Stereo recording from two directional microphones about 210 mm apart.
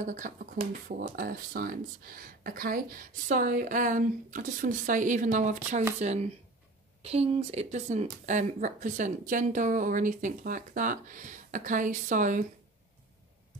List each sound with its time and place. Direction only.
0.0 s speech: 35° right (ahead or behind)